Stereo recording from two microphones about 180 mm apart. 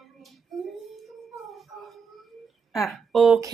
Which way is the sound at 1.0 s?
Centre (ahead or behind).